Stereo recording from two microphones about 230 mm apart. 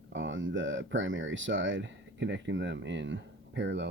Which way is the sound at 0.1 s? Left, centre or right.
Right.